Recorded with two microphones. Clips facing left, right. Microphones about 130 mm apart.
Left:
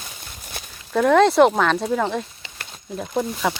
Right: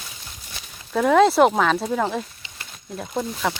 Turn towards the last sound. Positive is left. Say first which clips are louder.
# left 2 dB
turn(degrees=5)  # may be behind; listen again after turning